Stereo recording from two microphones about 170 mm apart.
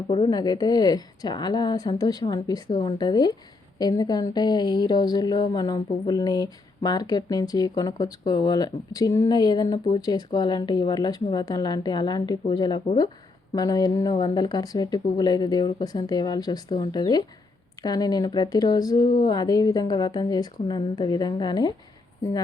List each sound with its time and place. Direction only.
0.1 s speech: 25° left (ahead or behind)